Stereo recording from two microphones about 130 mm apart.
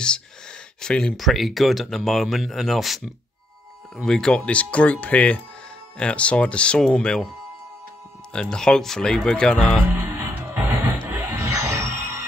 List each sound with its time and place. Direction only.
0.7 s speech: 5° left (ahead or behind)
4.0 s speech: 5° left (ahead or behind)
8.3 s speech: 5° left (ahead or behind)
9.8 s music: 20° right (ahead or behind)